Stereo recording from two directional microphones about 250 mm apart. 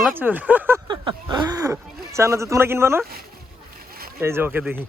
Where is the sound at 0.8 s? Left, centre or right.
Centre.